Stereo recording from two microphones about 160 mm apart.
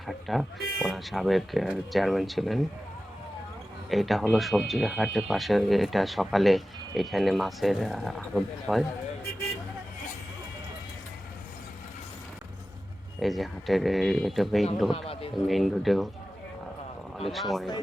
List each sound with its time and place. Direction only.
0.1 s speech: centre (ahead or behind)
3.8 s speech: centre (ahead or behind)
13.1 s speech: centre (ahead or behind)
14.9 s speech: 35° left (ahead or behind)
15.4 s speech: centre (ahead or behind)
17.2 s speech: centre (ahead or behind)